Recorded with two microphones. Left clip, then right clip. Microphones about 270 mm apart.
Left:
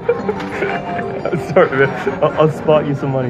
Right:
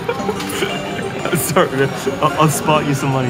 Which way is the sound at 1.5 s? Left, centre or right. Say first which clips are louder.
Left 4 dB; centre.